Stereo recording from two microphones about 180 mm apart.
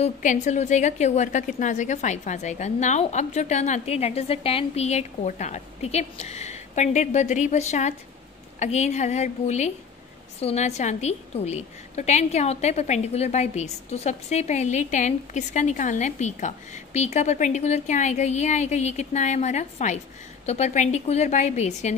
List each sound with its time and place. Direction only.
0.0 s a woman's voice: 40° left (ahead or behind)